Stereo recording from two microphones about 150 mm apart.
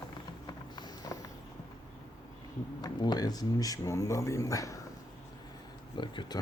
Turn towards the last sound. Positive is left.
turn(degrees=30)  # may be behind; listen again after turning